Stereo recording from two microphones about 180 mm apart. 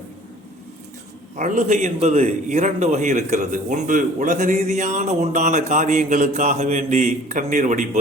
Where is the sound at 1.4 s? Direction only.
40° right (ahead or behind).